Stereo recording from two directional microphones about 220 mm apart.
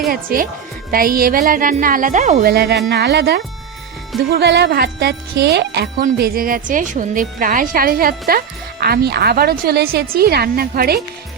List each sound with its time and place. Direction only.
0.1 s a woman's voice: 40° right (ahead or behind)